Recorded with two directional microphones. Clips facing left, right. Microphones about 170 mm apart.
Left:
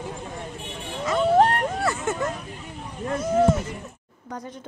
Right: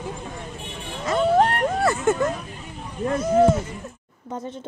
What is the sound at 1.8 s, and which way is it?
Vehicle, 45° right (ahead or behind).